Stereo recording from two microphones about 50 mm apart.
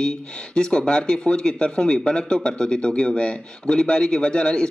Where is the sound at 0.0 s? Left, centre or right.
Centre.